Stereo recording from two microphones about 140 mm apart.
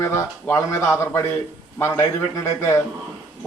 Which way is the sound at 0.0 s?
20° left (ahead or behind).